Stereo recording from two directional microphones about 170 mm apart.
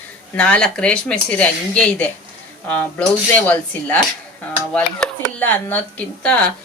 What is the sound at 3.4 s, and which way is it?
Speech, 10° left (ahead or behind).